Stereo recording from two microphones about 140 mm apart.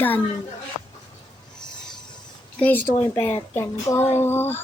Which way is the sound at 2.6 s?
15° left (ahead or behind).